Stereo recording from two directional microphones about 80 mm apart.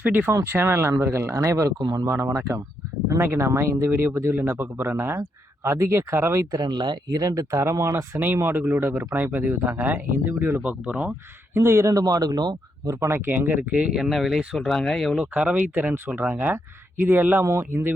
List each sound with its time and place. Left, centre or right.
0.0 s speech: right
1.8 s speech: right
2.0 s speech: right
6.6 s speech: right
7.2 s speech: right
8.2 s speech: right
11.5 s speech: right
13.1 s speech: right; by 15.3 s centre
15.3 s speech: centre
17.4 s speech: right